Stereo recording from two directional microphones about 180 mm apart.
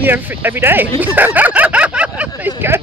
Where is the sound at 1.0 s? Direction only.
10° right (ahead or behind).